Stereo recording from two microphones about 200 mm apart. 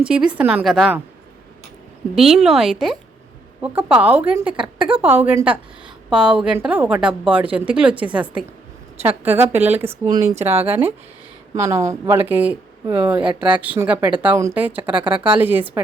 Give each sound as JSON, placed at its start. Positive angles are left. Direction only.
{"t": 0.0, "sound": "a woman's voice", "side_deg": -5}
{"t": 2.1, "sound": "a woman's voice", "side_deg": 0}
{"t": 4.8, "sound": "speech", "side_deg": -25}
{"t": 5.0, "sound": "a woman's voice", "side_deg": -10}